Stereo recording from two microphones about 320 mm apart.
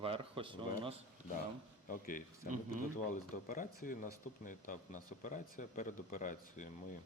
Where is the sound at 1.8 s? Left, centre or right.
Left.